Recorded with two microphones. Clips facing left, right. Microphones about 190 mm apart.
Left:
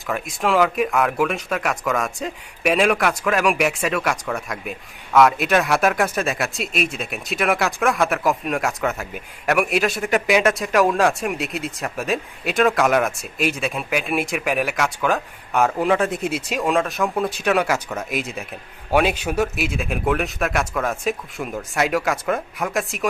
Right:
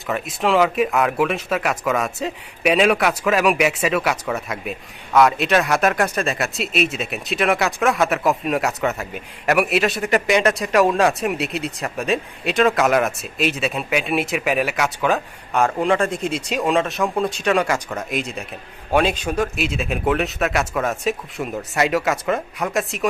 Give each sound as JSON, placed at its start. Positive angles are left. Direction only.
{"t": 0.1, "sound": "speech", "side_deg": 0}